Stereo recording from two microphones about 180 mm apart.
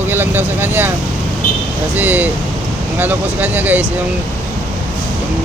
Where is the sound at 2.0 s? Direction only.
10° right (ahead or behind).